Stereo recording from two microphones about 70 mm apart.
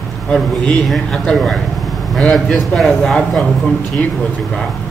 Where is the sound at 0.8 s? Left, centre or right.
Centre.